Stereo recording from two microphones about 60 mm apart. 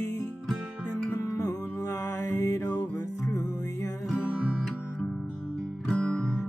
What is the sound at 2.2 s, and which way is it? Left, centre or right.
Mantra, left.